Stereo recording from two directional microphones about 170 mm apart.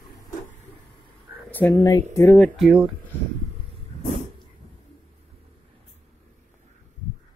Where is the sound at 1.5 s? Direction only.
15° left (ahead or behind).